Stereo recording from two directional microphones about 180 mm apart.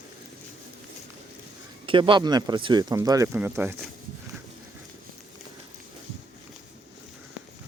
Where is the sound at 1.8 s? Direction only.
30° right (ahead or behind); by 3.8 s 10° right (ahead or behind).